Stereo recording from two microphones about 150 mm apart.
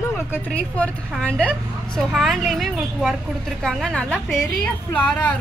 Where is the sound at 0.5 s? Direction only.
10° left (ahead or behind).